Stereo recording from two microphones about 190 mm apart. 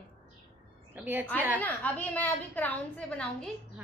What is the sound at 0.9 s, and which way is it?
Speech, 10° right (ahead or behind).